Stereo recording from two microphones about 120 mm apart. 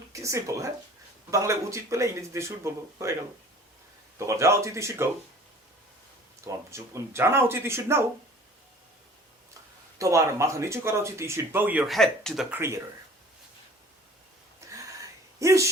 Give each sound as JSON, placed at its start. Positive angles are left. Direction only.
{"t": 0.1, "sound": "speech", "side_deg": -25}
{"t": 4.2, "sound": "speech", "side_deg": -25}
{"t": 6.7, "sound": "speech", "side_deg": -25}
{"t": 10.0, "sound": "speech", "side_deg": -25}
{"t": 11.9, "sound": "speech", "side_deg": 5}
{"t": 12.5, "sound": "speech", "side_deg": -20}
{"t": 14.6, "sound": "a sound", "side_deg": -25}
{"t": 15.4, "sound": "speech", "side_deg": -25}